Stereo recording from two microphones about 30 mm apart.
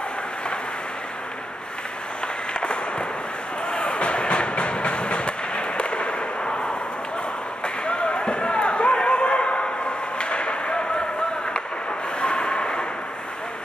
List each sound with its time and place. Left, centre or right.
2.6 s fireworks: left
3.6 s train: left
7.6 s basketball bounce: left
12.2 s vehicle: left